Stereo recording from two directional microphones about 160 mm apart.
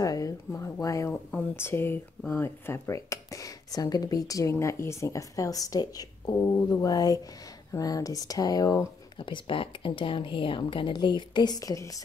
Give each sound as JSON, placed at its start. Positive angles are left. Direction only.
{"t": 0.0, "sound": "speech", "side_deg": 20}